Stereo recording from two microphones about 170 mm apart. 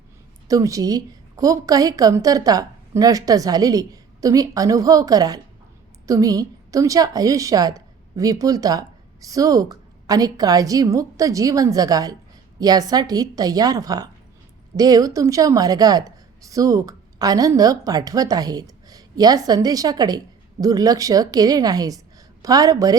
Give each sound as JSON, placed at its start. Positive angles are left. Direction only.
{"t": 0.4, "sound": "a woman's voice", "side_deg": -20}